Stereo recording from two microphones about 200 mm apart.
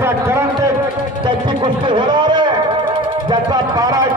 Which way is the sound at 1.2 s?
25° right (ahead or behind).